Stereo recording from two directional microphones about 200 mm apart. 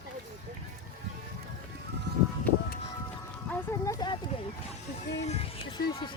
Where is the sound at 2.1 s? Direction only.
60° right (ahead or behind).